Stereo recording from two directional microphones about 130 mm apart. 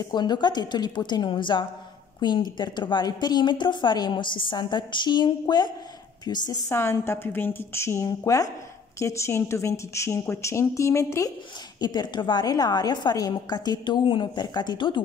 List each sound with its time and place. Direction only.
0.0 s a woman's voice: 35° left (ahead or behind)
6.7 s a woman's voice: 20° left (ahead or behind); by 15.0 s 35° left (ahead or behind)